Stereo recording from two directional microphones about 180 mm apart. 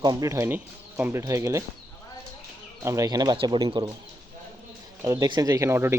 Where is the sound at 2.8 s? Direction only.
15° right (ahead or behind).